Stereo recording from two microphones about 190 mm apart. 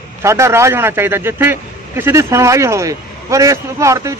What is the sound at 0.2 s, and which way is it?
A man's voice, 15° right (ahead or behind).